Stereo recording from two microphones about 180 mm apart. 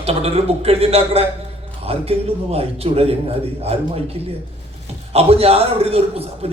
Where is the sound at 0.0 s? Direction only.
35° right (ahead or behind).